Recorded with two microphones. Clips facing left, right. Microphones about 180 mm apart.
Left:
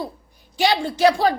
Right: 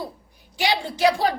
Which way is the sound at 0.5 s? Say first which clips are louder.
Left 4 dB; 15° right (ahead or behind).